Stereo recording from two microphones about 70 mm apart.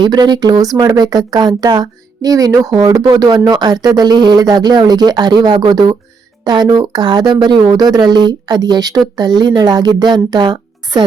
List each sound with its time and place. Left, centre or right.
0.0 s speech: right
9.1 s a woman's voice: right